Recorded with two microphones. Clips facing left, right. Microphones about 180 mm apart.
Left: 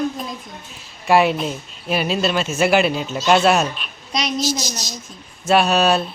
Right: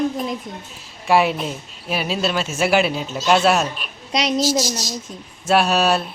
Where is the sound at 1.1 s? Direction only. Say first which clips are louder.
Left 2 dB; centre (ahead or behind).